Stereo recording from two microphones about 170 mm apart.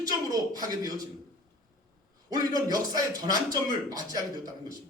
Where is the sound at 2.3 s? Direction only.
20° right (ahead or behind).